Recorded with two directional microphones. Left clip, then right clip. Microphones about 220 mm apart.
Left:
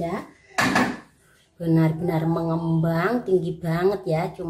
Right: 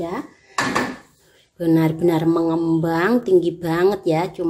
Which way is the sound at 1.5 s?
35° right (ahead or behind).